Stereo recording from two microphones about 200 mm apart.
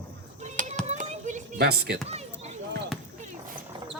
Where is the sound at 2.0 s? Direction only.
30° right (ahead or behind).